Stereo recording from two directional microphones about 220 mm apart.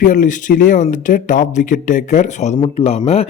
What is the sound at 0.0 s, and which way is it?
A man's voice, 35° left (ahead or behind).